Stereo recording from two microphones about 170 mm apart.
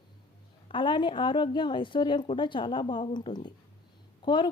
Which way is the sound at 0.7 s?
30° left (ahead or behind).